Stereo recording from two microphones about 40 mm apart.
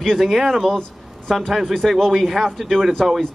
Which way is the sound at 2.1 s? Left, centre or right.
Centre.